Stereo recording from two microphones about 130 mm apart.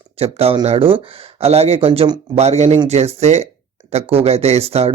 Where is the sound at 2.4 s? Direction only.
60° right (ahead or behind).